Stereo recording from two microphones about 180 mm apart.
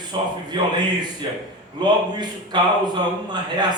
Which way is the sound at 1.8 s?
25° right (ahead or behind).